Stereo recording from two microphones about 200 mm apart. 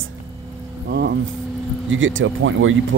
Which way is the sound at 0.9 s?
55° right (ahead or behind).